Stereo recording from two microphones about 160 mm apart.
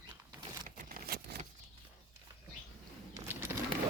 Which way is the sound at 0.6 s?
60° right (ahead or behind).